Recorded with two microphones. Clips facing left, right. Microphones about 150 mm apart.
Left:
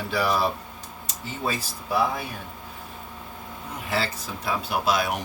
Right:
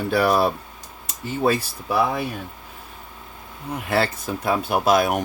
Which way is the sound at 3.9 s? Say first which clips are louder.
Right 6 dB; 55° right (ahead or behind).